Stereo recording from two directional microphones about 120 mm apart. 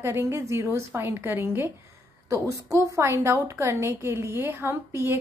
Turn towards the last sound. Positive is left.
turn(degrees=-20)  # may be behind; listen again after turning